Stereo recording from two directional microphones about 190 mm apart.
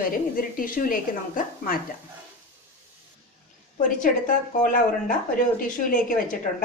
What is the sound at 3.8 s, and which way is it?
Speech, 45° left (ahead or behind).